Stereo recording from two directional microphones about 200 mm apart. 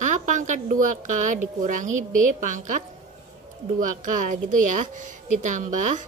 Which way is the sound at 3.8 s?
40° right (ahead or behind).